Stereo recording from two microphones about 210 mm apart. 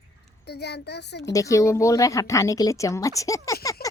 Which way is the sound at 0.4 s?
50° left (ahead or behind).